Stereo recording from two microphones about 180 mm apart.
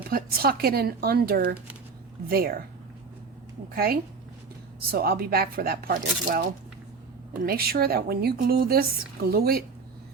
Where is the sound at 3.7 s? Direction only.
55° right (ahead or behind).